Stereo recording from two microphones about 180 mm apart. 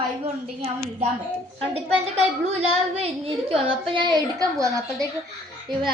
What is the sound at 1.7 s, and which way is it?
A woman's voice, 35° right (ahead or behind).